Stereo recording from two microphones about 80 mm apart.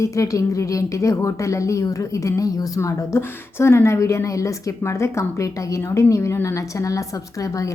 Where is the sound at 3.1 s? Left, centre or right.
Left.